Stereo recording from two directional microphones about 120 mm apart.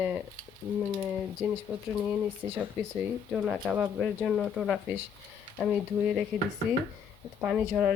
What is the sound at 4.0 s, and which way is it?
Speech, centre (ahead or behind).